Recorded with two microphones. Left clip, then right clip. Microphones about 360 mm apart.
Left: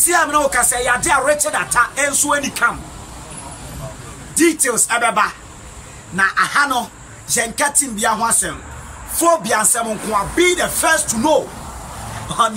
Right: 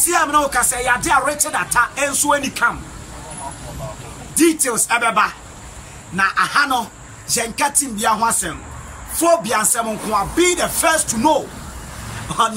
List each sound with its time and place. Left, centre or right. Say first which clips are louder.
0.0 s music: left 1 dB; centre
4.4 s music: left 1 dB; centre